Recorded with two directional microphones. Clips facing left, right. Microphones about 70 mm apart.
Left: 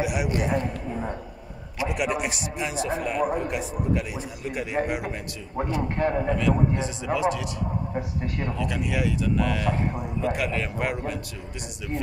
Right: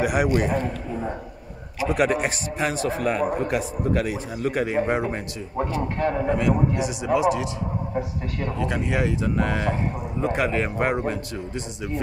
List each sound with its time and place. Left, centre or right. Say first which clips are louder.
0.0 s a man's voice: right 5 dB; right
1.9 s a man's voice: right 6 dB; right
2.6 s speech: right 4 dB; right
4.8 s speech: right 5 dB; right
6.2 s speech: right 2 dB; right
8.5 s speech: right 4 dB; right